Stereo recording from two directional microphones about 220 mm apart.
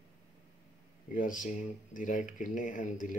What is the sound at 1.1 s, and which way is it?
Speech, 35° left (ahead or behind).